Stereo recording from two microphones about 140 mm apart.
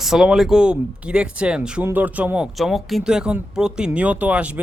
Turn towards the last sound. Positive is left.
turn(degrees=-10)  # may be behind; listen again after turning